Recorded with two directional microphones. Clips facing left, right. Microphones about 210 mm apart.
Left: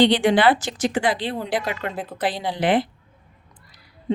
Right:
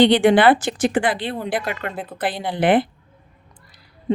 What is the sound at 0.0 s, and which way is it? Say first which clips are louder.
Speech: right 3 dB; 55° right (ahead or behind).